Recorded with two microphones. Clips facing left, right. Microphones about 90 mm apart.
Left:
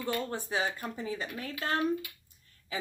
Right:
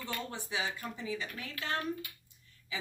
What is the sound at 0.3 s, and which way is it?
Speech, 45° left (ahead or behind).